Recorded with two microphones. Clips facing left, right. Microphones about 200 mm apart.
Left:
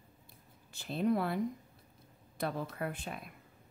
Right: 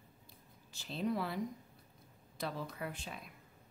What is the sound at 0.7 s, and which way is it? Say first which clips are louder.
Speech: left 5 dB; 55° left (ahead or behind).